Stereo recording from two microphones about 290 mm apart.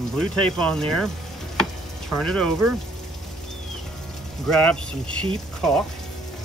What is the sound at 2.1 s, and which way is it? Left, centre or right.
Speech, centre.